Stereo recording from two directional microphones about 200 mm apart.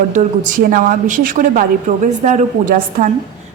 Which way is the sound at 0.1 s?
40° right (ahead or behind).